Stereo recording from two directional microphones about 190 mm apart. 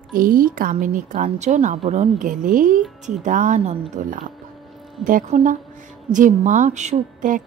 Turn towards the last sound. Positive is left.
turn(degrees=-40)  # may be behind; listen again after turning